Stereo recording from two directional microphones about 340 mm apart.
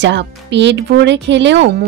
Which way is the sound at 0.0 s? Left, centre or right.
Right.